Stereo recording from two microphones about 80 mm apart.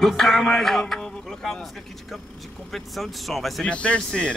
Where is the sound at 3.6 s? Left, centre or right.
Centre.